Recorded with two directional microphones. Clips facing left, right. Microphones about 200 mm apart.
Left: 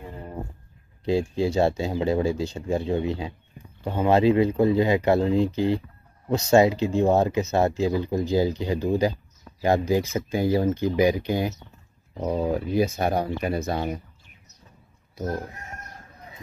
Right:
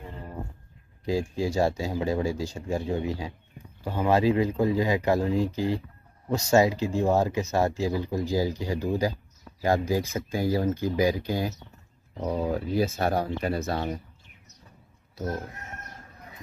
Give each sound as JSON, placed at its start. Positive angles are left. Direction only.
{"t": 1.0, "sound": "speech", "side_deg": 25}